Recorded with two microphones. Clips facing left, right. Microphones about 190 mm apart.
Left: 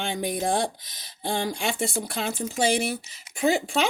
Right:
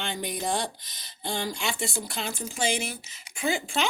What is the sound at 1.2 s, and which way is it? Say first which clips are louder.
Speech: left 4 dB; 55° left (ahead or behind).